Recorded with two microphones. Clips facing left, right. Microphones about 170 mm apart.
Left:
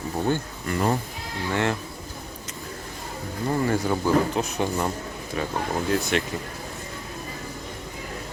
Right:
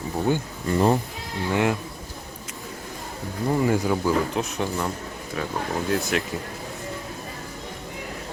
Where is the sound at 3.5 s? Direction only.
15° right (ahead or behind).